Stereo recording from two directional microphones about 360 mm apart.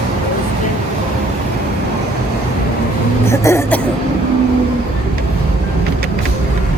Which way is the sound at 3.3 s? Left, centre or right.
Centre.